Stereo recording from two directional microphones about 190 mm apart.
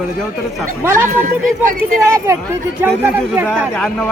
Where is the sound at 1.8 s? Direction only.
15° right (ahead or behind).